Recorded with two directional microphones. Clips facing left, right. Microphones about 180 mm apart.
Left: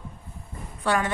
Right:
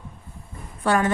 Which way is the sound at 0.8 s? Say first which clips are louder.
Right 4 dB; 45° right (ahead or behind).